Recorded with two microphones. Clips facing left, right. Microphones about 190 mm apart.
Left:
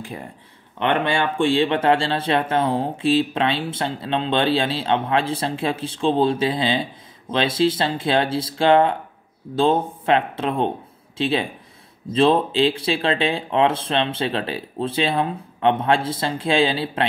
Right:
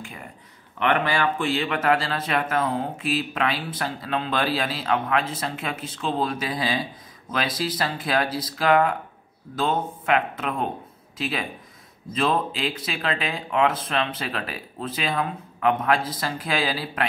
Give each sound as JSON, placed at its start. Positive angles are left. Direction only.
{"t": 0.0, "sound": "speech", "side_deg": 35}